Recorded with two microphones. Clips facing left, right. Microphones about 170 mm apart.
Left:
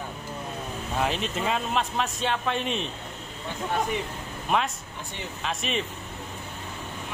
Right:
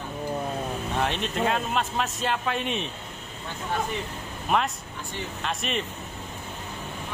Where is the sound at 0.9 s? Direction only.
Centre (ahead or behind).